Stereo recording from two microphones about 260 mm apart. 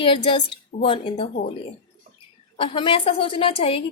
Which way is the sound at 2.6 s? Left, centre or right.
Centre.